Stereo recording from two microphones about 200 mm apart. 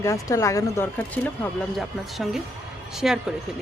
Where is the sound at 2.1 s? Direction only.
Centre (ahead or behind).